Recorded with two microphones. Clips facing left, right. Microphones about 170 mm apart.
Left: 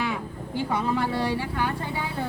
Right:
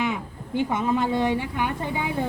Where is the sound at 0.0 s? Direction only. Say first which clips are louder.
Right 2 dB; 20° right (ahead or behind).